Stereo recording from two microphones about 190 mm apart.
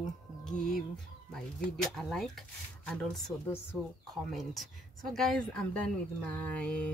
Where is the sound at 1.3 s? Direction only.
5° left (ahead or behind).